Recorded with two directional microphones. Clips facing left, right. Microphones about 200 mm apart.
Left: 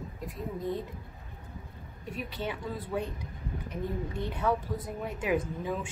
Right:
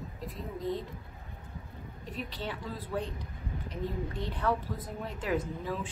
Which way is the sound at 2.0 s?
10° left (ahead or behind).